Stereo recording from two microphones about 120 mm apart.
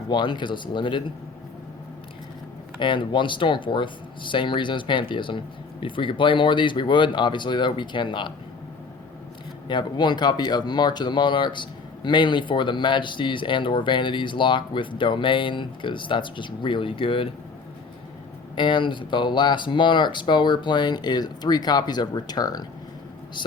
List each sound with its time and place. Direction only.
0.1 s speech: 40° left (ahead or behind)
2.7 s speech: 40° left (ahead or behind)
9.6 s speech: 40° left (ahead or behind)
18.5 s speech: 45° left (ahead or behind)